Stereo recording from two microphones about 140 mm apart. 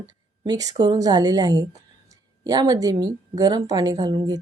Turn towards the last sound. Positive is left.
turn(degrees=-30)  # may be behind; listen again after turning